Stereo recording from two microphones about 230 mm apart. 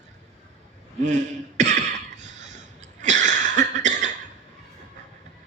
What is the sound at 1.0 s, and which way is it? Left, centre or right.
Throat clearing, right.